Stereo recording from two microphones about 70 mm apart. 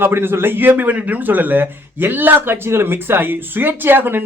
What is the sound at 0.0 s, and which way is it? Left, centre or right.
A man's voice, right.